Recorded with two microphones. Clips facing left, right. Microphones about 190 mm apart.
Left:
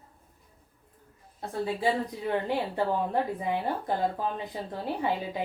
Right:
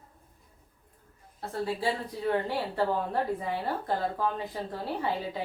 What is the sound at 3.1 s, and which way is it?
Speech, 15° left (ahead or behind).